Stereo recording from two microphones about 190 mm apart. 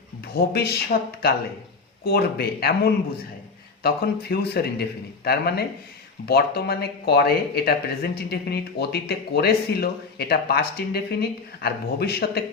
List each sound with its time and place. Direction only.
0.3 s speech: 55° left (ahead or behind)
2.0 s speech: 55° left (ahead or behind)